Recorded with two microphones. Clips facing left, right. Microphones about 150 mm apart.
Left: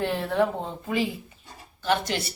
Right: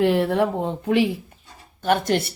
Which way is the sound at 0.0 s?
80° right.